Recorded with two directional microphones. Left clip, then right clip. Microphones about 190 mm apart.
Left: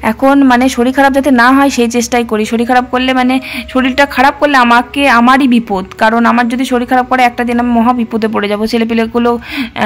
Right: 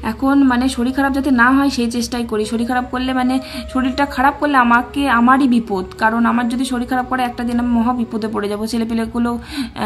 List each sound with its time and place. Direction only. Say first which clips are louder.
0.2 s speech: left 7 dB; 35° left (ahead or behind)